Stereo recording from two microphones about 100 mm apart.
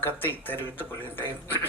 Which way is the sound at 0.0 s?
20° left (ahead or behind).